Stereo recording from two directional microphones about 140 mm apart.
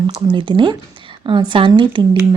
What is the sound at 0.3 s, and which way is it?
Speech, 35° right (ahead or behind).